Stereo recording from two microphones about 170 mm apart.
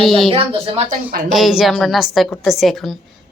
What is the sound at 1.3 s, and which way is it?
A woman's voice, centre (ahead or behind).